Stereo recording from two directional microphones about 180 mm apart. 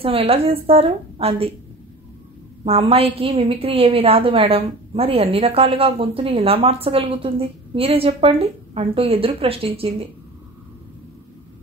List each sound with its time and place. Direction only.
0.0 s a woman's voice: 30° right (ahead or behind)
2.6 s a woman's voice: 30° right (ahead or behind)